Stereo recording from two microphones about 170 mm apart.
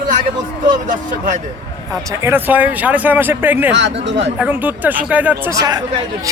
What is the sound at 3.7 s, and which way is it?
Speech, 90° right.